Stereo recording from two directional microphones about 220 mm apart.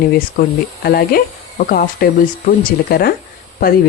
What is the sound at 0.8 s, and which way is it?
Speech, 45° left (ahead or behind).